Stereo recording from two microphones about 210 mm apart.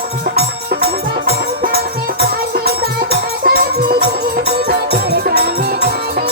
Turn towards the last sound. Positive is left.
turn(degrees=-50)  # may be behind; listen again after turning